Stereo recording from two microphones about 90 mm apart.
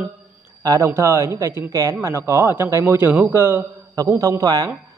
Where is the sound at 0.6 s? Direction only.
40° right (ahead or behind).